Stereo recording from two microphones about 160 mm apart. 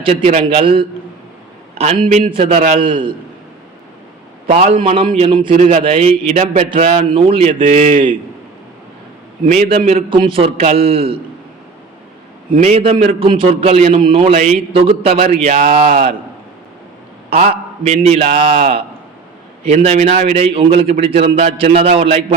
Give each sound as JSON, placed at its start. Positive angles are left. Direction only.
{"t": 0.0, "sound": "a man's voice", "side_deg": -40}
{"t": 2.0, "sound": "a man's voice", "side_deg": -45}
{"t": 2.8, "sound": "a man's voice", "side_deg": -35}
{"t": 4.9, "sound": "a man's voice", "side_deg": -40}
{"t": 9.5, "sound": "a man's voice", "side_deg": -45}
{"t": 12.6, "sound": "a man's voice", "side_deg": -40}
{"t": 17.2, "sound": "a man's voice", "side_deg": -45}